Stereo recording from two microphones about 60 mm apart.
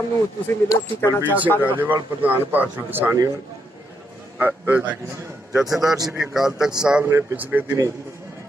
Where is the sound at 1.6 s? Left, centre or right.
Right.